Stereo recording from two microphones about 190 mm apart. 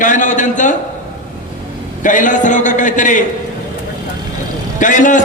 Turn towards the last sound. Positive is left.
turn(degrees=40)  # may be behind; listen again after turning